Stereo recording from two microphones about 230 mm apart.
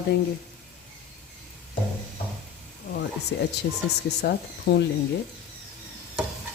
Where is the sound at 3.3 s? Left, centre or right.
Left.